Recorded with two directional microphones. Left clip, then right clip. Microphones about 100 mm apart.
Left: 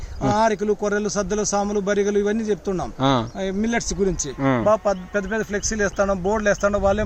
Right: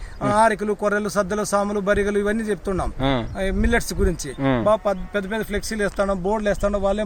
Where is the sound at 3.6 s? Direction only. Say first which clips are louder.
Even; 25° right (ahead or behind).